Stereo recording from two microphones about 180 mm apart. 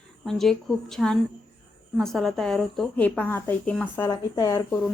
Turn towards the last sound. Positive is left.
turn(degrees=15)  # may be behind; listen again after turning